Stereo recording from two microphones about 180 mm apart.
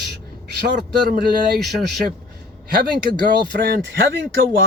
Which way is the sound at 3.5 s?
55° right (ahead or behind).